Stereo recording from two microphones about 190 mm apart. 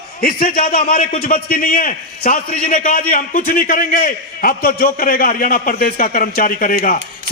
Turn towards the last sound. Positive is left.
turn(degrees=45)  # may be behind; listen again after turning